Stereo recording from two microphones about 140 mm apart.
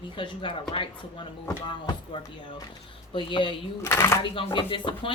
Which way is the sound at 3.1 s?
35° left (ahead or behind).